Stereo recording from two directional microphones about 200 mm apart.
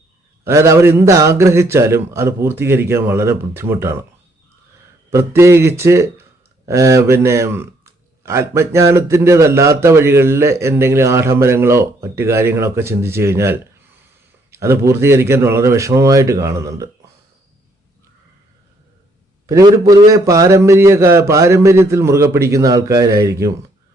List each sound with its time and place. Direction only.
0.4 s a man's voice: 15° right (ahead or behind)
5.1 s a man's voice: 15° right (ahead or behind)
19.5 s a man's voice: 15° right (ahead or behind)